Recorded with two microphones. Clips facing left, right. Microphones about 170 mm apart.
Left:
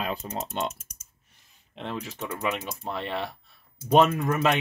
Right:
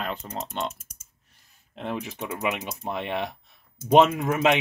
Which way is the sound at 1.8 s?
15° right (ahead or behind).